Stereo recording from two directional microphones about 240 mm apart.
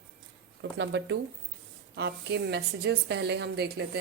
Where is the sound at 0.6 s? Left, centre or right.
Right.